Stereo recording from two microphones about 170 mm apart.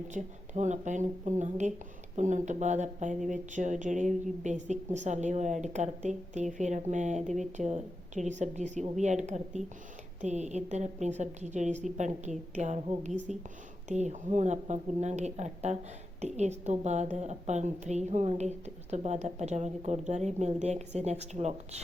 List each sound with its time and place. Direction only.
0.1 s a woman's voice: 45° right (ahead or behind)